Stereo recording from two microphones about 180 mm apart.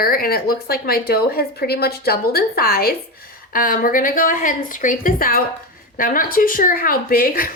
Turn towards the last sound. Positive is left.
turn(degrees=55)  # may be behind; listen again after turning